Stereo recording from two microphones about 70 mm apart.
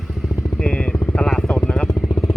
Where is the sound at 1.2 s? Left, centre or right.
Centre.